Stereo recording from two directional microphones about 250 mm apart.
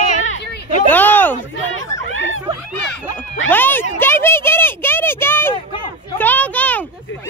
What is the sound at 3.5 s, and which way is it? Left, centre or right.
Speech, centre.